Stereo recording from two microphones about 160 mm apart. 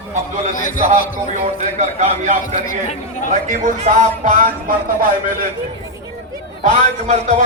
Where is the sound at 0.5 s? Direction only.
55° left (ahead or behind).